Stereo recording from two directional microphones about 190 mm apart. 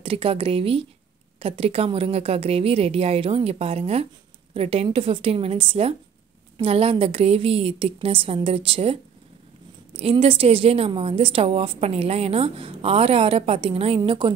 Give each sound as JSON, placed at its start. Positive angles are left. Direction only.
{"t": 0.0, "sound": "a woman's voice", "side_deg": -30}
{"t": 9.9, "sound": "a woman's voice", "side_deg": -30}